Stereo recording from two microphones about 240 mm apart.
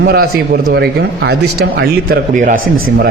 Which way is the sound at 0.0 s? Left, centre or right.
Right.